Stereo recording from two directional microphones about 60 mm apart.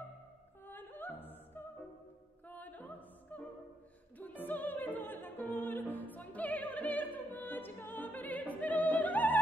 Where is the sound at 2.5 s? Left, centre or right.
Left.